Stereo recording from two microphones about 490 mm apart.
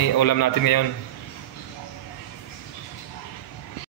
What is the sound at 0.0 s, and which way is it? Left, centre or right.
Speech, left.